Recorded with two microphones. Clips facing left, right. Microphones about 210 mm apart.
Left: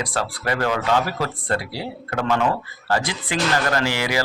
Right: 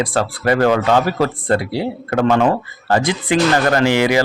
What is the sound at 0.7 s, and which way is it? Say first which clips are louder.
Speech: right 6 dB; 65° right (ahead or behind).